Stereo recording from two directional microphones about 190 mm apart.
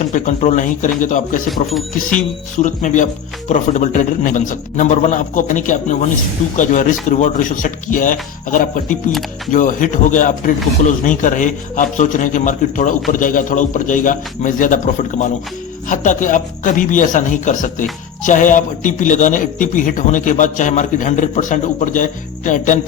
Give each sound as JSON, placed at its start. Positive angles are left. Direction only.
{"t": 0.0, "sound": "a man's voice", "side_deg": 40}
{"t": 15.9, "sound": "a man's voice", "side_deg": 40}